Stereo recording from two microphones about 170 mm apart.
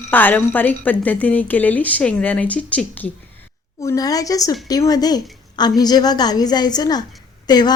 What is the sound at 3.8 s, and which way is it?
A woman's voice, 20° left (ahead or behind).